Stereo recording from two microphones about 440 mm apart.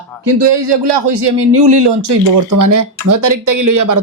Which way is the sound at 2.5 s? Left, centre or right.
Right.